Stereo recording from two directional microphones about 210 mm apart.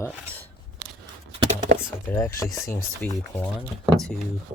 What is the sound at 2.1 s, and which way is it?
Speech, 15° left (ahead or behind).